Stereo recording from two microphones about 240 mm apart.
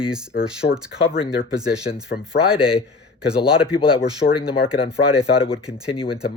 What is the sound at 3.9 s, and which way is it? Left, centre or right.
Speech, left.